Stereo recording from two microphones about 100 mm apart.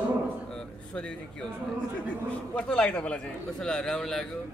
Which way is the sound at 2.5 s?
10° left (ahead or behind).